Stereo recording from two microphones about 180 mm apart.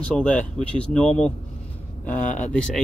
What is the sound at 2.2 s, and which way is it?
Speech, 45° left (ahead or behind).